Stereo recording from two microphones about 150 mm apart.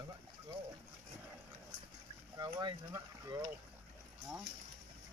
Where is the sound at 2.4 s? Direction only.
25° right (ahead or behind).